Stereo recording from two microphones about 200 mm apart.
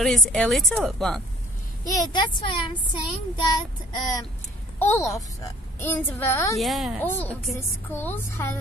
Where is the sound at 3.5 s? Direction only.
20° left (ahead or behind).